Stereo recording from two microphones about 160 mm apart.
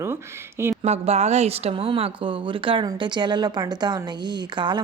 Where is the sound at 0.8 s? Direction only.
40° right (ahead or behind).